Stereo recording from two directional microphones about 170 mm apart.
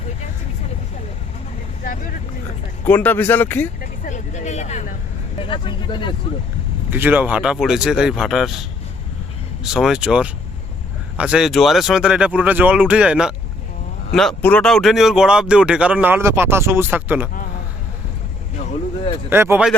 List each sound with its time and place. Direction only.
1.8 s speech: 50° left (ahead or behind)
2.8 s speech: 10° left (ahead or behind)
3.8 s vehicle: 50° left (ahead or behind)
5.4 s speech: 30° left (ahead or behind)
6.9 s speech: 10° right (ahead or behind)
9.6 s speech: 5° right (ahead or behind)
19.3 s speech: 15° right (ahead or behind)